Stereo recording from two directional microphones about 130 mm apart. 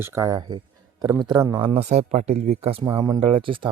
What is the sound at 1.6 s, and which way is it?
Speech, 50° right (ahead or behind).